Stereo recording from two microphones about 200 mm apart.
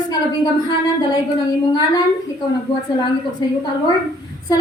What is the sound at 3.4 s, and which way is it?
Speech, 20° left (ahead or behind).